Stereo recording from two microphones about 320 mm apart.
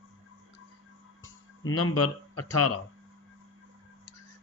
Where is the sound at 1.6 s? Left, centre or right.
Left.